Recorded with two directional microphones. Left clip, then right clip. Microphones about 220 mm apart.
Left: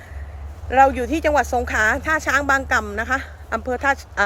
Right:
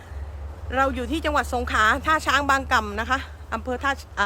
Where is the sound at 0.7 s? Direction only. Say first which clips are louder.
Left 8 dB; 5° left (ahead or behind).